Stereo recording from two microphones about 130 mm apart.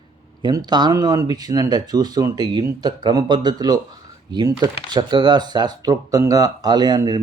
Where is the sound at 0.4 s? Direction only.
35° right (ahead or behind).